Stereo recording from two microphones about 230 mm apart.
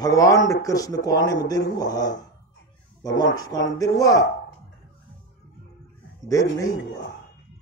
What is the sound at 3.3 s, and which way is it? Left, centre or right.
Speech, centre.